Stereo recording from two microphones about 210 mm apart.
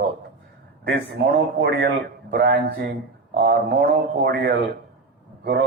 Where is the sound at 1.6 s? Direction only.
50° right (ahead or behind).